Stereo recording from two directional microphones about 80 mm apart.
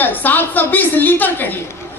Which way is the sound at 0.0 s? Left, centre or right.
Left.